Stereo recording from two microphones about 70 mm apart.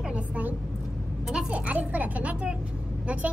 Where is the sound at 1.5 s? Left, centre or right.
Centre.